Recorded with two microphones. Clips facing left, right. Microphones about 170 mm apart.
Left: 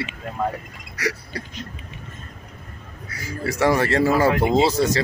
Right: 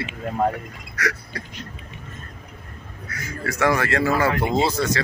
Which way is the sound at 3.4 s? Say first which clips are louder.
Left 2 dB; 35° left (ahead or behind).